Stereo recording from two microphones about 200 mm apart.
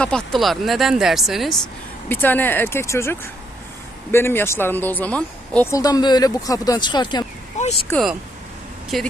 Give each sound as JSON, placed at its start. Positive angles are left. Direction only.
{"t": 0.0, "sound": "speech", "side_deg": 0}
{"t": 5.8, "sound": "speech", "side_deg": 20}
{"t": 7.6, "sound": "speech", "side_deg": 35}
{"t": 8.9, "sound": "speech", "side_deg": 0}